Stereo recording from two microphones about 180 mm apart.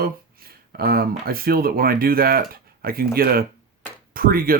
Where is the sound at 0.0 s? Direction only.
55° right (ahead or behind).